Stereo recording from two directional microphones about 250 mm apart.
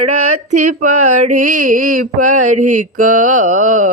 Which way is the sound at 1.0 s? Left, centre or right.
Right.